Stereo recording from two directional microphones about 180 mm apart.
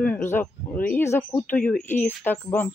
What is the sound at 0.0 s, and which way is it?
Speech, 10° left (ahead or behind).